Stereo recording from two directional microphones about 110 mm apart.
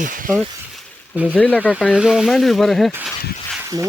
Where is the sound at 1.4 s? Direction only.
15° left (ahead or behind).